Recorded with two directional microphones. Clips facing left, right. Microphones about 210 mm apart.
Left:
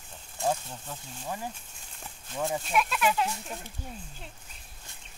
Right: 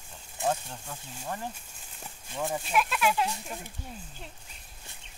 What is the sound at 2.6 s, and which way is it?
Speech, centre (ahead or behind).